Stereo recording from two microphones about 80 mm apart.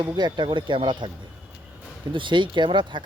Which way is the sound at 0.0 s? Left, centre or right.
Right.